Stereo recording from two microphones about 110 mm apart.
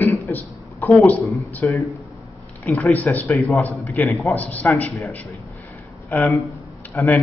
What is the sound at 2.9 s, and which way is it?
A man's voice, 15° left (ahead or behind).